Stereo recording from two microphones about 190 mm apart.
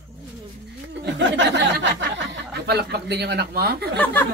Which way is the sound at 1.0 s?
70° right (ahead or behind).